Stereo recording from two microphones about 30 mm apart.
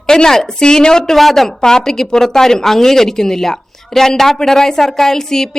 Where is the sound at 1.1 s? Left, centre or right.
Centre.